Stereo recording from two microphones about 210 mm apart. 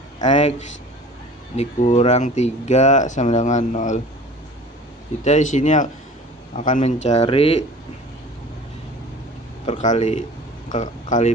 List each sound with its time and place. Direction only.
0.3 s speech: 35° left (ahead or behind)
1.5 s speech: 30° left (ahead or behind)
5.2 s speech: 35° left (ahead or behind)
9.6 s speech: 35° left (ahead or behind)